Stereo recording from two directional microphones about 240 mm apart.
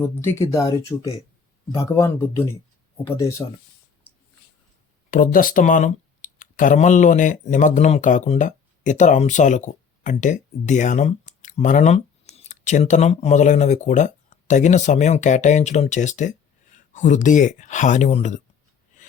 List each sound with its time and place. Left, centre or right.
0.0 s speech: centre
5.1 s speech: left
18.9 s a sound: left